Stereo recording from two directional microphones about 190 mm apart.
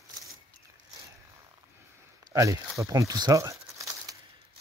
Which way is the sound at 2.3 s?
15° right (ahead or behind).